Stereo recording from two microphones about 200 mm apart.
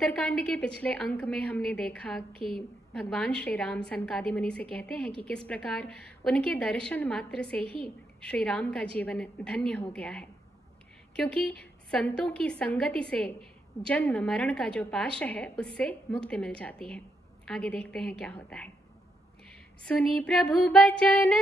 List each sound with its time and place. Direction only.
0.0 s a woman's voice: 5° left (ahead or behind)
2.3 s a woman's voice: 50° left (ahead or behind)
2.9 s a woman's voice: 5° left (ahead or behind)
19.8 s a woman's voice: 5° left (ahead or behind)